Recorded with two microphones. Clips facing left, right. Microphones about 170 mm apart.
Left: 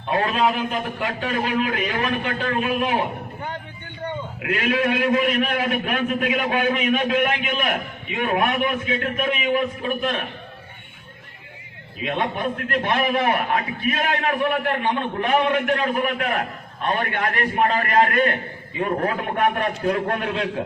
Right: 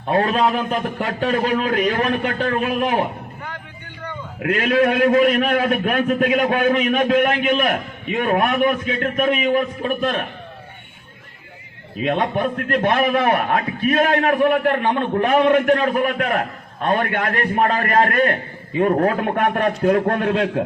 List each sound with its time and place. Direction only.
0.1 s a man's voice: 40° right (ahead or behind)
4.4 s a man's voice: 45° right (ahead or behind)
12.0 s a man's voice: 45° right (ahead or behind)